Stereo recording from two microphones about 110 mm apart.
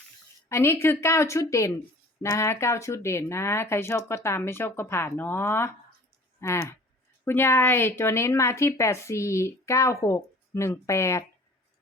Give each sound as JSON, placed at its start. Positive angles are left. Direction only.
{"t": 0.4, "sound": "a woman's voice", "side_deg": 25}